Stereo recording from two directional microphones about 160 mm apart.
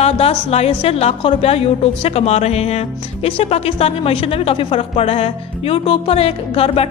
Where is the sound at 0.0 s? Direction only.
40° left (ahead or behind).